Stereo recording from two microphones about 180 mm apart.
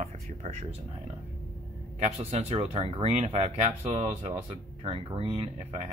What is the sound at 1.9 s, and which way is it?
Speech, 35° right (ahead or behind).